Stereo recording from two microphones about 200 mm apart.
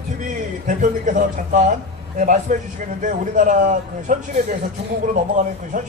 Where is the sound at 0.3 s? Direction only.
40° right (ahead or behind).